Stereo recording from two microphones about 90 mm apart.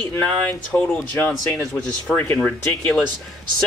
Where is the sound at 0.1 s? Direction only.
15° left (ahead or behind).